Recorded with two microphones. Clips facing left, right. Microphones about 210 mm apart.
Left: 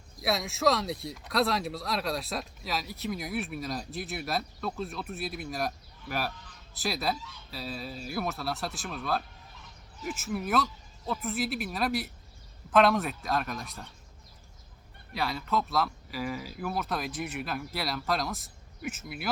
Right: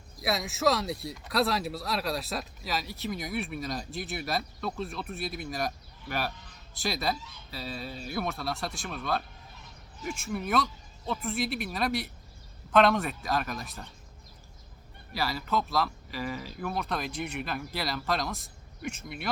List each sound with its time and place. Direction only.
0.2 s speech: centre (ahead or behind)
15.1 s speech: centre (ahead or behind)